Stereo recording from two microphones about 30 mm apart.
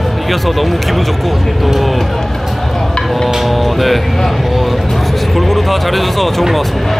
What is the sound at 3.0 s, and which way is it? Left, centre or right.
Music, centre.